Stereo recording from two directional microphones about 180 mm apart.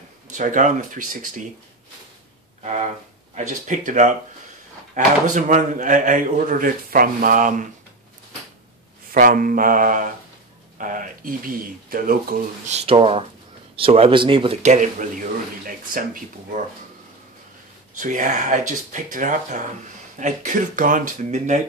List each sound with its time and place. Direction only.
0.3 s a man's voice: 45° right (ahead or behind)
2.6 s a man's voice: 40° right (ahead or behind)
9.1 s a man's voice: 50° right (ahead or behind)
12.7 s a man's voice: 30° right (ahead or behind); by 16.6 s 50° right (ahead or behind)
17.9 s a man's voice: 45° right (ahead or behind)